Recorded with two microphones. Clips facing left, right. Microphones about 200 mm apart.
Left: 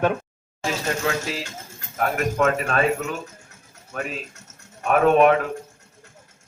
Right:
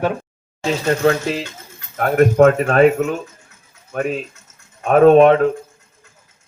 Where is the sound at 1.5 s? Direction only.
45° left (ahead or behind).